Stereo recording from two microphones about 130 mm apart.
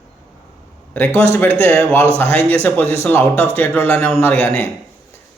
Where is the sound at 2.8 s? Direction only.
50° right (ahead or behind).